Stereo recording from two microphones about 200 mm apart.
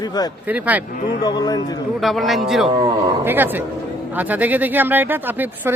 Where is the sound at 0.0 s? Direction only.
20° left (ahead or behind).